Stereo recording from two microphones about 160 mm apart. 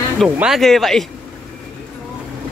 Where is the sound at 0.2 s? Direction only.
Centre (ahead or behind).